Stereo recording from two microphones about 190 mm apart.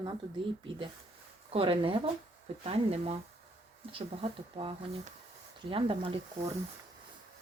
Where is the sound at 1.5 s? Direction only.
30° right (ahead or behind).